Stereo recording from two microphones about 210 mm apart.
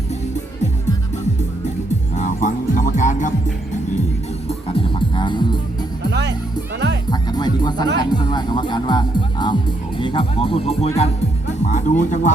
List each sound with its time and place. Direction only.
2.1 s music: 35° left (ahead or behind)
4.4 s music: 25° left (ahead or behind)
6.1 s music: 55° right (ahead or behind)
7.1 s music: 20° left (ahead or behind)
7.9 s speech: 20° left (ahead or behind)